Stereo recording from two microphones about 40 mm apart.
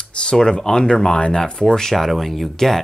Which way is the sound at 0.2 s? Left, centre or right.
Left.